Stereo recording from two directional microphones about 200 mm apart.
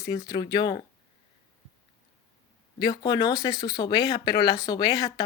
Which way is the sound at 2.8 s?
20° left (ahead or behind).